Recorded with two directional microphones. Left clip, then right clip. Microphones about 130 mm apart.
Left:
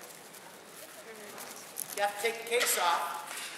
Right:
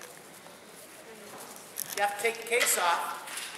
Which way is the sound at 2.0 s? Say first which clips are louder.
Right 2 dB; centre (ahead or behind).